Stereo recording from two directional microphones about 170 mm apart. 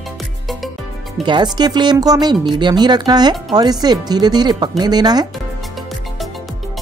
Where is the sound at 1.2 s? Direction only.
25° right (ahead or behind).